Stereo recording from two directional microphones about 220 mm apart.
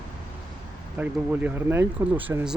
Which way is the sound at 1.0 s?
10° right (ahead or behind).